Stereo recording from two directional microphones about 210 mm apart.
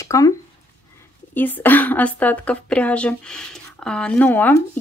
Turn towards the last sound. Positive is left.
turn(degrees=10)  # may be behind; listen again after turning